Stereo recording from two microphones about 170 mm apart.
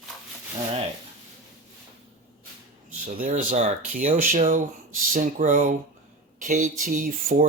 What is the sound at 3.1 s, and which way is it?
Speech, 50° right (ahead or behind).